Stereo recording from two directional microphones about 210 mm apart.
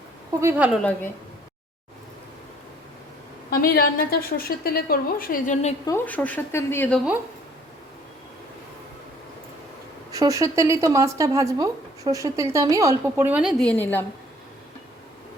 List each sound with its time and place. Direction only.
0.3 s speech: 10° right (ahead or behind)
3.5 s a woman's voice: 45° left (ahead or behind)
5.8 s speech: 10° left (ahead or behind)
10.1 s speech: 15° right (ahead or behind); by 14.0 s 5° left (ahead or behind)